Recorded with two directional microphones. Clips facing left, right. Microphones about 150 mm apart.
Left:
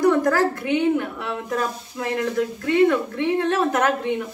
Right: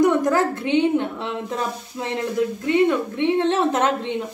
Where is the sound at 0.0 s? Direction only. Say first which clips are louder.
Even; 20° right (ahead or behind).